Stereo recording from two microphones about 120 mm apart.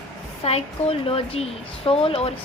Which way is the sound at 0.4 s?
55° left (ahead or behind).